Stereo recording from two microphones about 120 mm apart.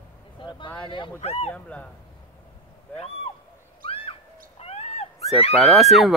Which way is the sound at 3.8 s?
50° left (ahead or behind).